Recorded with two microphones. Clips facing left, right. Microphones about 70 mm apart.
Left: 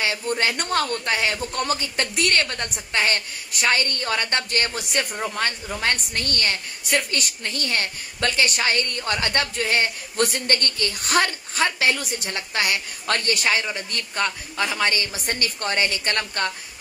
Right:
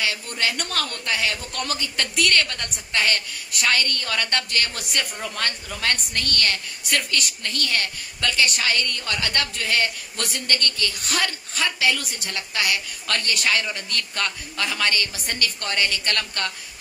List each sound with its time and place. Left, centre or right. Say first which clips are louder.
0.0 s a man's voice: left 3 dB; left